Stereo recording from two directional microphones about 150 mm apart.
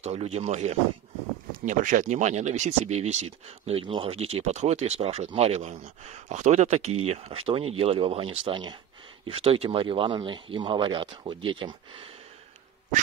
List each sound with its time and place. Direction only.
0.0 s speech: 45° right (ahead or behind)
1.7 s speech: 60° right (ahead or behind); by 12.1 s 35° right (ahead or behind)